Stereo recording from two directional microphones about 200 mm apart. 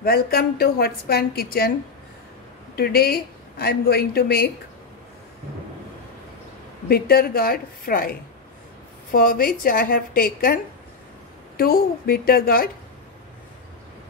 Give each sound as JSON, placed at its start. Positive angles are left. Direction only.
{"t": 0.0, "sound": "a woman's voice", "side_deg": 50}
{"t": 2.7, "sound": "a woman's voice", "side_deg": 50}
{"t": 6.9, "sound": "a woman's voice", "side_deg": 50}